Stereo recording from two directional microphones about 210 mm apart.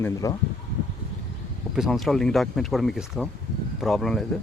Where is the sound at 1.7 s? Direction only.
Centre (ahead or behind).